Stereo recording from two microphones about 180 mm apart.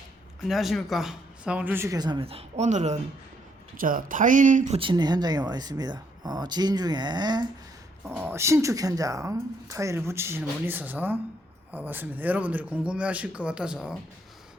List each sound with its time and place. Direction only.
0.4 s speech: centre (ahead or behind); by 3.0 s 40° right (ahead or behind)
3.8 s speech: 50° right (ahead or behind)
4.8 s speech: 25° right (ahead or behind)
8.0 s speech: 10° right (ahead or behind)